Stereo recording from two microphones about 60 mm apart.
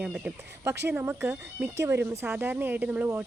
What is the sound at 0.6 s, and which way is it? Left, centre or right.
Speech, right.